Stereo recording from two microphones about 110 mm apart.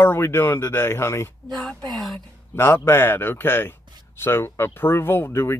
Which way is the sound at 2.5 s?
20° left (ahead or behind).